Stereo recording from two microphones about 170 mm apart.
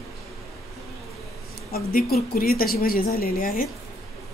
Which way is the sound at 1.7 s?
60° left (ahead or behind).